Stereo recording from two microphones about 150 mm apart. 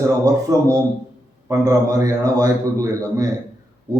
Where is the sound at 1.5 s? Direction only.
25° right (ahead or behind).